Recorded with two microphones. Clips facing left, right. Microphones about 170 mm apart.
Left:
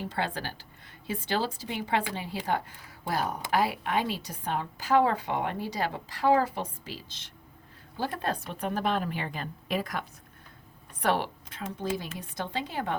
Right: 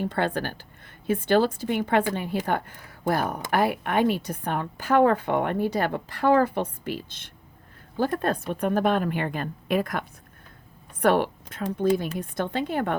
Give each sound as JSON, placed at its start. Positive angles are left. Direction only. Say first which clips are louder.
{"t": 0.0, "sound": "a woman's voice", "louder": "right 6 dB", "side_deg": -55}
{"t": 11.0, "sound": "a woman's voice", "louder": "right 7 dB", "side_deg": -55}